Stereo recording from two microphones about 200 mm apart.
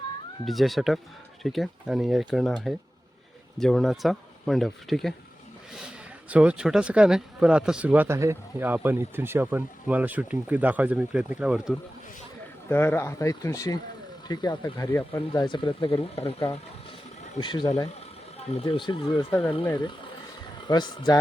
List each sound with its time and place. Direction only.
0.4 s speech: centre (ahead or behind)
12.6 s speech: 10° left (ahead or behind)
17.4 s speech: 20° left (ahead or behind)